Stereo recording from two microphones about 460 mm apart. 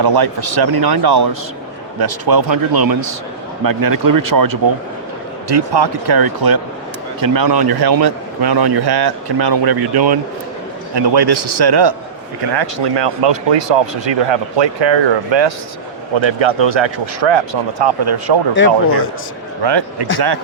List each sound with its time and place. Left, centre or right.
0.0 s a man's voice: right
5.5 s a man's voice: right
16.1 s speech: right
18.5 s speech: left
19.6 s speech: right